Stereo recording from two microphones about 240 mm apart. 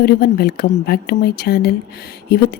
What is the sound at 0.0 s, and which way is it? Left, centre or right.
A woman's voice, left.